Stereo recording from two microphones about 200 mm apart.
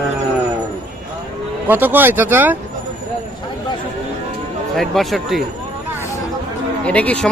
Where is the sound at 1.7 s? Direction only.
10° right (ahead or behind).